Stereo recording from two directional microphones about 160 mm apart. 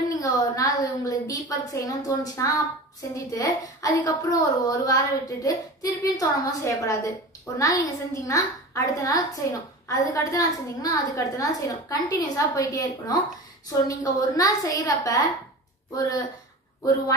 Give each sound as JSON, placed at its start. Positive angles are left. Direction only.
{"t": 0.2, "sound": "a woman's voice", "side_deg": 20}